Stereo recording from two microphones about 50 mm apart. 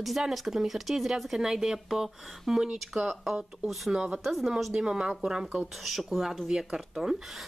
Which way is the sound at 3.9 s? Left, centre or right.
Right.